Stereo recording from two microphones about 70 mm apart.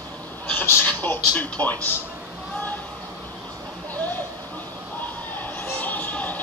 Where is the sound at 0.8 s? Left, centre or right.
Left.